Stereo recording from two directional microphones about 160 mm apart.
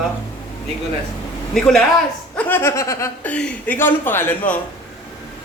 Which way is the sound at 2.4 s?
15° left (ahead or behind).